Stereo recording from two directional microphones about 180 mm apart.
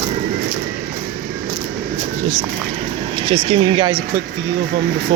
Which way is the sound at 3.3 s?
30° right (ahead or behind).